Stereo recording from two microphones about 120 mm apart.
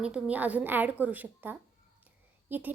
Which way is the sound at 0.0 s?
10° right (ahead or behind).